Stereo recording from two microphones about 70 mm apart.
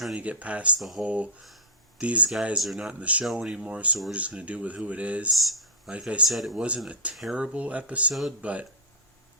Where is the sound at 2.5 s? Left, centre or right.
Centre.